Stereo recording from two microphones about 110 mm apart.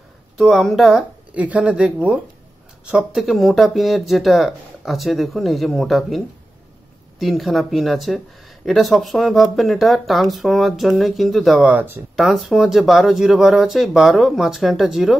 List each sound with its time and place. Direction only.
0.4 s speech: centre (ahead or behind)
11.6 s speech: 15° right (ahead or behind)
12.2 s speech: centre (ahead or behind)